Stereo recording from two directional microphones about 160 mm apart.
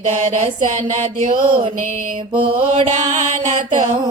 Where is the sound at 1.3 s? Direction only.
30° right (ahead or behind).